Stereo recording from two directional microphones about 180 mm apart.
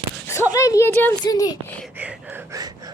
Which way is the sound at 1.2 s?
20° left (ahead or behind).